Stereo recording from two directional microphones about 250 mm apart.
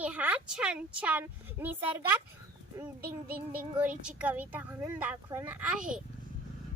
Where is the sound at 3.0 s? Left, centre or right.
Right.